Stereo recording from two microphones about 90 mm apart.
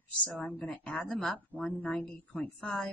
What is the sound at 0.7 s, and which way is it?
Speech, 5° left (ahead or behind).